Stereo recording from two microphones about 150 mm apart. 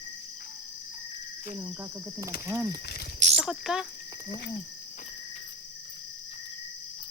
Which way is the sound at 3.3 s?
Centre (ahead or behind).